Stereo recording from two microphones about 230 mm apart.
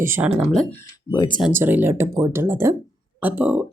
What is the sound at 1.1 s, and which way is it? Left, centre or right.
Speech, centre.